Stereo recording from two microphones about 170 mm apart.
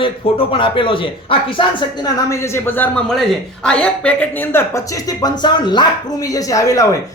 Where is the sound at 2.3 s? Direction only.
15° left (ahead or behind).